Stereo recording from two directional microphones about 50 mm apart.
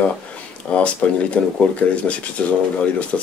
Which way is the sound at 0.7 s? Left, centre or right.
Left.